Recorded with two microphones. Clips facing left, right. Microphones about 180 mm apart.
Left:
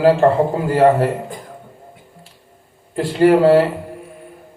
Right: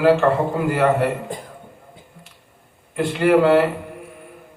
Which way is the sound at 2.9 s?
35° left (ahead or behind).